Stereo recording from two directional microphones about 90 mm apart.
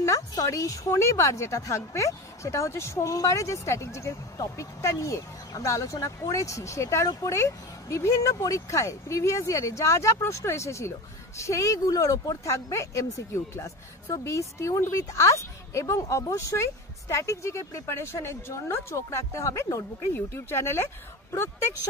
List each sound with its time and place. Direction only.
0.0 s a woman's voice: 40° left (ahead or behind)